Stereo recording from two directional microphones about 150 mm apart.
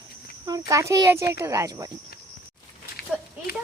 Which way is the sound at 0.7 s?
20° right (ahead or behind).